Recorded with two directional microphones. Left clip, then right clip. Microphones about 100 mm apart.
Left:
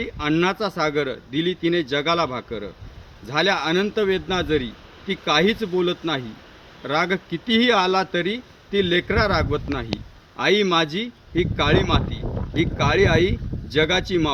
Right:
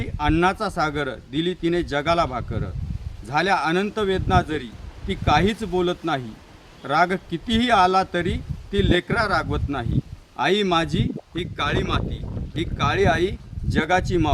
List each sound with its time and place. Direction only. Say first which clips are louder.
0.0 s speech: right 1 dB; 30° right (ahead or behind)